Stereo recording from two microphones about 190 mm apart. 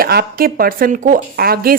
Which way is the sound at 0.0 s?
55° right (ahead or behind).